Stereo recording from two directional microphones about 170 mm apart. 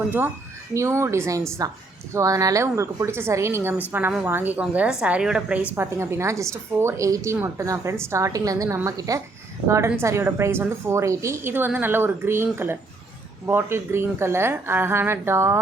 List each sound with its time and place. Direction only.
0.7 s a woman's voice: 15° right (ahead or behind)